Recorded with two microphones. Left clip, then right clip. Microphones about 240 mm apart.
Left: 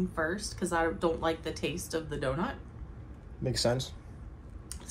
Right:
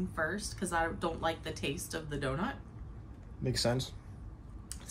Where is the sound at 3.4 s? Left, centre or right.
Centre.